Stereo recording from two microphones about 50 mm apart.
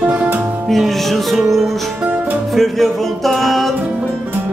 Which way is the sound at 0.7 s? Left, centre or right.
Centre.